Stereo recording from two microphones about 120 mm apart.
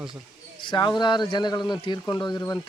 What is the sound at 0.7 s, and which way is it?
Speech, 40° left (ahead or behind).